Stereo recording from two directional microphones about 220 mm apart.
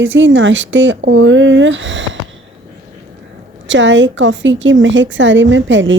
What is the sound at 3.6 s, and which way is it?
Speech, 55° right (ahead or behind).